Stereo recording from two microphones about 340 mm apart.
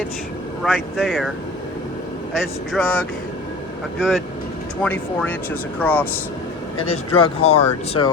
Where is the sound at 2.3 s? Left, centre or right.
Centre.